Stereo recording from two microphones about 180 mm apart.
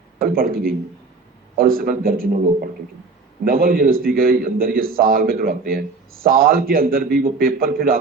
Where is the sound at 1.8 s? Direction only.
55° right (ahead or behind).